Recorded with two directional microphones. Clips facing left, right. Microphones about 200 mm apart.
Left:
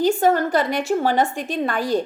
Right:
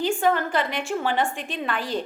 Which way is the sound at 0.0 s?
40° left (ahead or behind).